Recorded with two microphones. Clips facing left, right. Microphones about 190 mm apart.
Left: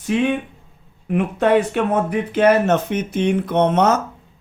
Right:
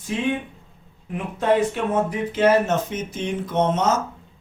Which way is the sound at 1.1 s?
70° left (ahead or behind).